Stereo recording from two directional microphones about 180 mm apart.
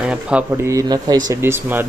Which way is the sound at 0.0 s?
5° right (ahead or behind).